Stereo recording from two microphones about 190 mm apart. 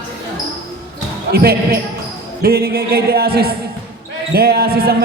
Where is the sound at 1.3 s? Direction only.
55° right (ahead or behind).